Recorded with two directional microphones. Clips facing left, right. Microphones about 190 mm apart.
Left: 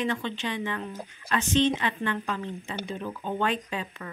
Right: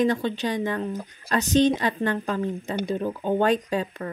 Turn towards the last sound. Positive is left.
turn(degrees=-40)  # may be behind; listen again after turning